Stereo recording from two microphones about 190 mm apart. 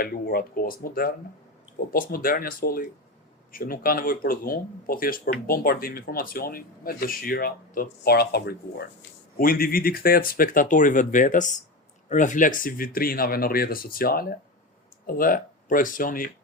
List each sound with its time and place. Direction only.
0.0 s speech: 50° left (ahead or behind)